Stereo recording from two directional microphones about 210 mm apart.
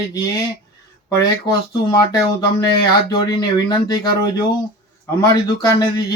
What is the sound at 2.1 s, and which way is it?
Speech, 15° left (ahead or behind).